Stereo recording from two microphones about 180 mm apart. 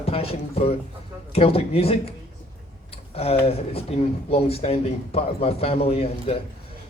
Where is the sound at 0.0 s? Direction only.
30° left (ahead or behind).